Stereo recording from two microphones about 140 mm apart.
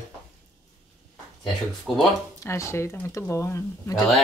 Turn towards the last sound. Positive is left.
turn(degrees=20)  # may be behind; listen again after turning